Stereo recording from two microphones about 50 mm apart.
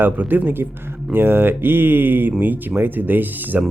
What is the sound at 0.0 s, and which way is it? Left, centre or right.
Speech, right.